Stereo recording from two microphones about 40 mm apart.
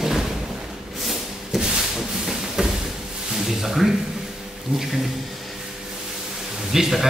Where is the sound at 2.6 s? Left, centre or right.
Centre.